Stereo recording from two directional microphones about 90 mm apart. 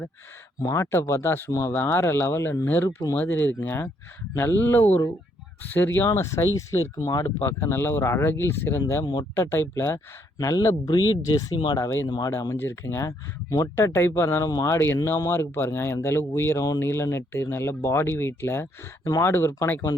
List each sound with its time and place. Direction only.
0.6 s speech: 35° left (ahead or behind)
6.1 s speech: 35° left (ahead or behind)
6.9 s speech: 45° left (ahead or behind)
7.3 s speech: 25° left (ahead or behind); by 11.5 s 45° left (ahead or behind)
11.5 s speech: 60° left (ahead or behind)
11.8 s speech: 30° left (ahead or behind)
12.0 s speech: 55° left (ahead or behind)
12.3 s speech: 40° left (ahead or behind)
12.5 s speech: 25° left (ahead or behind)
13.7 s speech: 25° left (ahead or behind)